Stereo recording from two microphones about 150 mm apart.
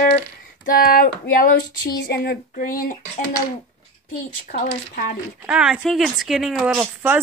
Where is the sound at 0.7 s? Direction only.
70° left (ahead or behind).